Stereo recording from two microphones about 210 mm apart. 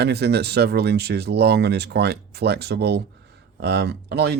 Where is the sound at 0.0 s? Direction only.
50° right (ahead or behind).